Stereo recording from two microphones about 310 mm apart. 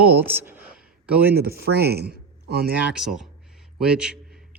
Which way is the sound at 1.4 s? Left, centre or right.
Right.